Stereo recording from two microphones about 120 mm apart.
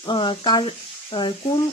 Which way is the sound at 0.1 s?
45° left (ahead or behind).